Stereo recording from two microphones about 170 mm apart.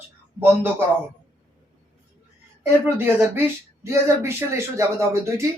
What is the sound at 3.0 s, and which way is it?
Speech, 15° right (ahead or behind).